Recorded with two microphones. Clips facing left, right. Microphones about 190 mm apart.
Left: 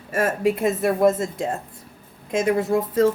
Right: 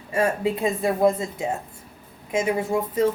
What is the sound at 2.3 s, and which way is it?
Speech, 90° left.